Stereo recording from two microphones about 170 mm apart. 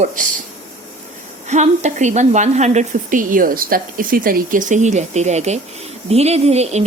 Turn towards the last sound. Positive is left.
turn(degrees=-40)  # may be behind; listen again after turning